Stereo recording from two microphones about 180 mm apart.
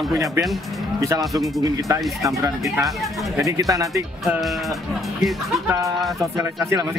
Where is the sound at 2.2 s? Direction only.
20° right (ahead or behind).